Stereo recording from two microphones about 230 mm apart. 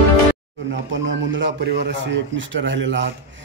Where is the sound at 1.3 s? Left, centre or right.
Right.